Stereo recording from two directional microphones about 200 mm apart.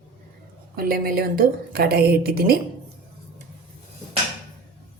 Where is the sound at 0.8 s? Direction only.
50° right (ahead or behind).